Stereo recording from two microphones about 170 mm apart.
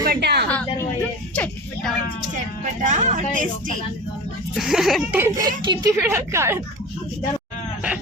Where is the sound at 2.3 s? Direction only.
45° right (ahead or behind).